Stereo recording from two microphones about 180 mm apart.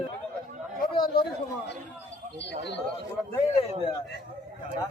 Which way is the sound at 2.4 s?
75° left (ahead or behind).